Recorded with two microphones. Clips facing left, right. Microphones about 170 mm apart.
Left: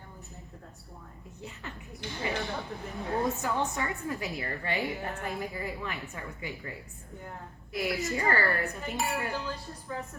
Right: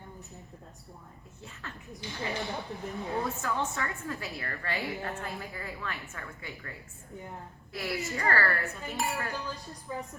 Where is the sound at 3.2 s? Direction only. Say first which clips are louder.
Left 3 dB; 20° left (ahead or behind).